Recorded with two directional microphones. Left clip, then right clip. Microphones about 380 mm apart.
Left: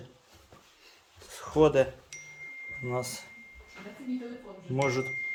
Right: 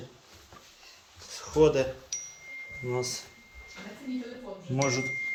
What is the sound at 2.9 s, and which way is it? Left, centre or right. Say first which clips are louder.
Speech: right 2 dB; centre.